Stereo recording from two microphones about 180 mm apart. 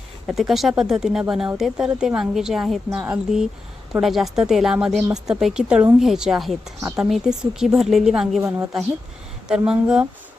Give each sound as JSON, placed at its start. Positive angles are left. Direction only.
{"t": 0.3, "sound": "a woman's voice", "side_deg": 0}
{"t": 6.7, "sound": "a woman's voice", "side_deg": -15}
{"t": 7.0, "sound": "a woman's voice", "side_deg": -5}
{"t": 8.4, "sound": "a woman's voice", "side_deg": -15}